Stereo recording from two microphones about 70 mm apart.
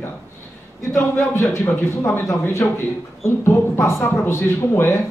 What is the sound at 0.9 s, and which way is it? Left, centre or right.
A woman's voice, left.